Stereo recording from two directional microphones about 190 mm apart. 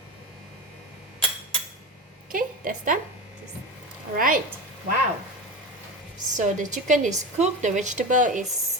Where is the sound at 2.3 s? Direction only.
45° right (ahead or behind).